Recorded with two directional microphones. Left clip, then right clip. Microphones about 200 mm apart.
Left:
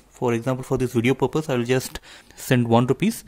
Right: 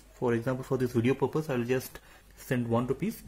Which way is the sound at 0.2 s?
30° left (ahead or behind).